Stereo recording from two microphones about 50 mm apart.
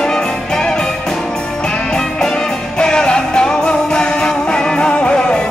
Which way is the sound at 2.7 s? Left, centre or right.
Centre.